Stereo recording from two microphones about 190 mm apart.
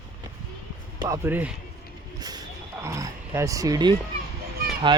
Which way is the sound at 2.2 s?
20° right (ahead or behind).